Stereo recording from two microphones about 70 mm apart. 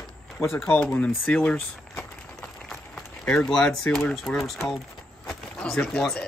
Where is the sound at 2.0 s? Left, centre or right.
Centre.